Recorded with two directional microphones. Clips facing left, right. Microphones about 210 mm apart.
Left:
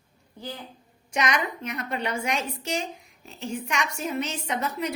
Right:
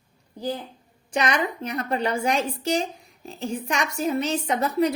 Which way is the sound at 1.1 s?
30° right (ahead or behind).